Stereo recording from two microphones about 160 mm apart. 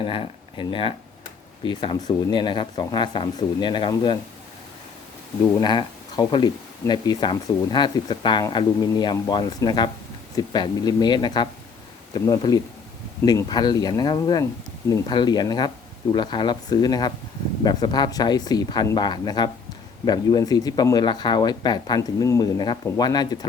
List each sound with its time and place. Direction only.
0.0 s speech: 35° left (ahead or behind)
5.5 s speech: 25° left (ahead or behind)